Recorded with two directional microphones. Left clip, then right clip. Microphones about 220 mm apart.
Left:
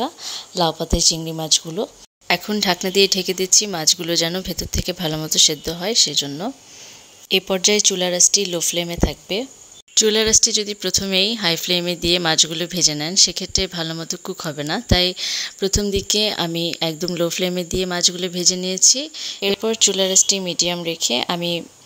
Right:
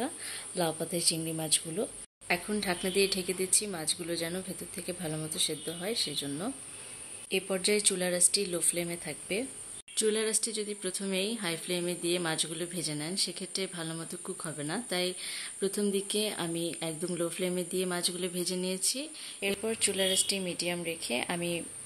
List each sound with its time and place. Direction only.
0.0 s speech: 30° left (ahead or behind)